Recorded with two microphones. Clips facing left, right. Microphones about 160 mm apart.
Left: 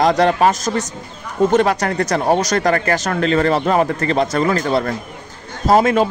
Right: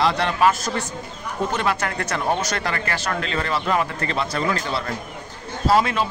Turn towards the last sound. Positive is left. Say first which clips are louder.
# left 6 dB
turn(degrees=45)  # may be behind; listen again after turning